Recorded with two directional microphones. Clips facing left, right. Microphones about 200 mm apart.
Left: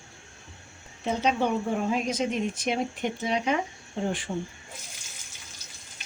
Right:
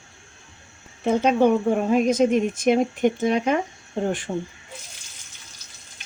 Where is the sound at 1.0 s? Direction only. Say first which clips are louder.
Right 8 dB; 55° right (ahead or behind).